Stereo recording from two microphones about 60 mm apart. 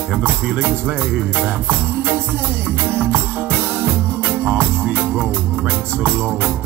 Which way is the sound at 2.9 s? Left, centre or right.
Right.